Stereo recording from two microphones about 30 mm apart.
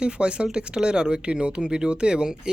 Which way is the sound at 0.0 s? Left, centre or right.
Right.